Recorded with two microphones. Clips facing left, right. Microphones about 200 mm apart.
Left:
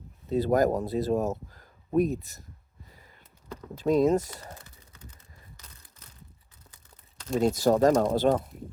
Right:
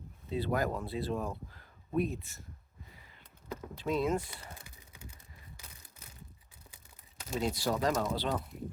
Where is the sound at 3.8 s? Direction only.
40° left (ahead or behind).